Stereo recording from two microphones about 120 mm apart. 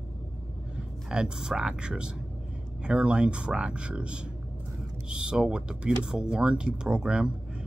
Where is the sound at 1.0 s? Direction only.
5° right (ahead or behind).